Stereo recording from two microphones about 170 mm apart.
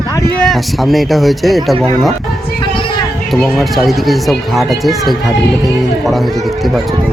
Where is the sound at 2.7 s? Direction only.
30° left (ahead or behind).